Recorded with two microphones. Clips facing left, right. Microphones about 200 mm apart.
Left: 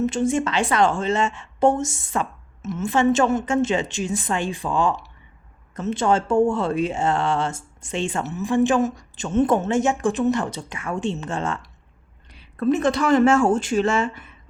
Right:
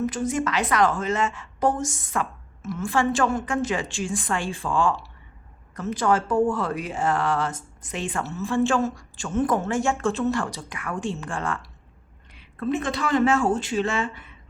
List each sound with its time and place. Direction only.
0.0 s speech: 25° left (ahead or behind)
12.3 s speech: 40° left (ahead or behind)